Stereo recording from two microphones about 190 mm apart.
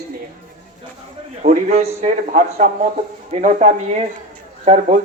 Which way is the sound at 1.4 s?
40° right (ahead or behind).